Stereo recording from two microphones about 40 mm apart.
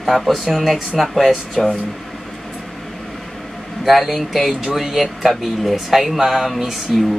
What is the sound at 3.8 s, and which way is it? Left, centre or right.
Speech, centre.